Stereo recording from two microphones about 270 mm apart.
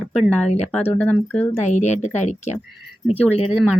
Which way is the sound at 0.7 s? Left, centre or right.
Centre.